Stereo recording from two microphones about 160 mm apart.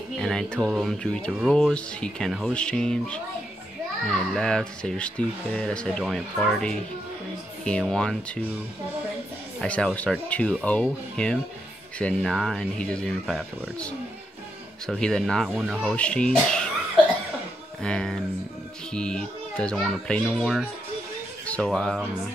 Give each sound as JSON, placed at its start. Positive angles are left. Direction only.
{"t": 0.2, "sound": "music", "side_deg": 5}
{"t": 9.6, "sound": "speech", "side_deg": 5}
{"t": 12.0, "sound": "music", "side_deg": 5}
{"t": 17.8, "sound": "music", "side_deg": 5}
{"t": 21.6, "sound": "music", "side_deg": 0}